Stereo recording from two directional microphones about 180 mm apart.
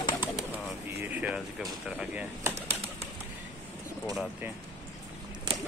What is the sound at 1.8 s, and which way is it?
Bird, 10° right (ahead or behind).